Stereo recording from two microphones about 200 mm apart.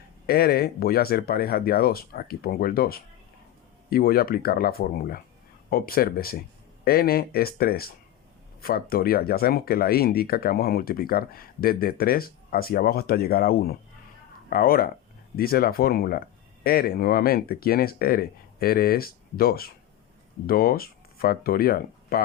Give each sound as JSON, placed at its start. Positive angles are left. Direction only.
{"t": 0.3, "sound": "speech", "side_deg": 50}